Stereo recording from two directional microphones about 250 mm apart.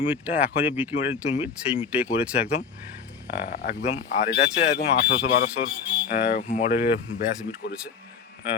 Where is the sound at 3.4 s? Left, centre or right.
Left.